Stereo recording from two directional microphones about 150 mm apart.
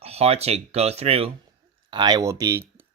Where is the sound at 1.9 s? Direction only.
30° right (ahead or behind).